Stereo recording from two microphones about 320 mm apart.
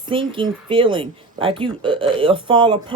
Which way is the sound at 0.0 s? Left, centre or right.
Centre.